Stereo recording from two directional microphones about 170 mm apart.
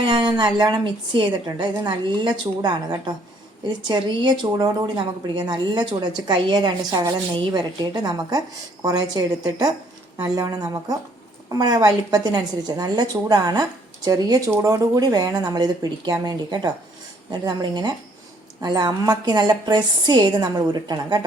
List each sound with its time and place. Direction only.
0.0 s a woman's voice: 25° right (ahead or behind)